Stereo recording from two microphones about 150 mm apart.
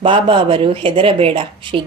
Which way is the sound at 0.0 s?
35° right (ahead or behind).